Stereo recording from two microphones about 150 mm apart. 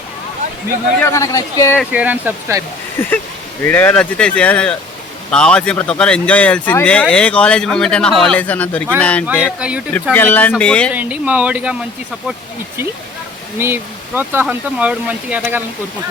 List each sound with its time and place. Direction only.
0.9 s speech: 15° left (ahead or behind)
1.9 s speech: 10° right (ahead or behind)
3.0 s speech: 15° left (ahead or behind)
9.6 s speech: 5° right (ahead or behind)
9.9 s speech: 10° left (ahead or behind)
10.9 s speech: 10° right (ahead or behind)
13.6 s speech: 15° right (ahead or behind)